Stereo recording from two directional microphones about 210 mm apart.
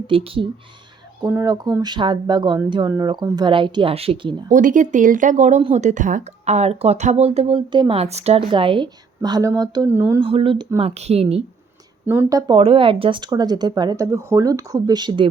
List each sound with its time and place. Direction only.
0.1 s speech: 25° right (ahead or behind)
1.2 s speech: 15° right (ahead or behind)
4.5 s speech: 40° right (ahead or behind); by 10.2 s 10° right (ahead or behind)
10.2 s speech: 25° right (ahead or behind)
12.0 s speech: 10° right (ahead or behind)